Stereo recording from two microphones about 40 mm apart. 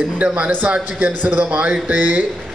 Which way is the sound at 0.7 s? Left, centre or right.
Right.